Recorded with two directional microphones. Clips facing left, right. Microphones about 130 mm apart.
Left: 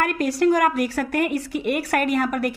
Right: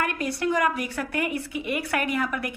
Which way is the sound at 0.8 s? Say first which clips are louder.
Left 6 dB; 40° left (ahead or behind).